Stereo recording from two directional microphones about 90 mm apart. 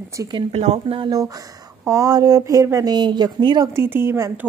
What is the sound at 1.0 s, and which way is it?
Speech, 45° right (ahead or behind).